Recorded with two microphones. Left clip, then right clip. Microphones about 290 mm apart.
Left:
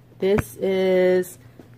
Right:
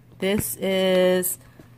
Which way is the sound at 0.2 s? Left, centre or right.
Right.